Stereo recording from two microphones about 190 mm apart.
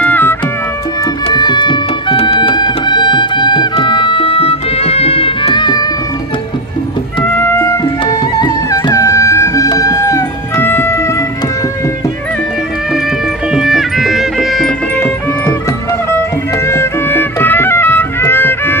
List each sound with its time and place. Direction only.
0.0 s music: 10° left (ahead or behind)
1.2 s music: 25° left (ahead or behind)
7.3 s music: 10° left (ahead or behind)
13.5 s music: centre (ahead or behind)
15.0 s music: 10° left (ahead or behind)
16.6 s music: 15° left (ahead or behind)